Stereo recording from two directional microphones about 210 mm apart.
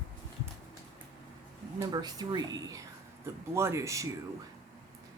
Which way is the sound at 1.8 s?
20° right (ahead or behind).